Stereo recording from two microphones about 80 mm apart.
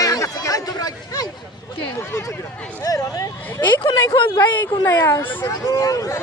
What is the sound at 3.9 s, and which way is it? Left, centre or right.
Speech, left.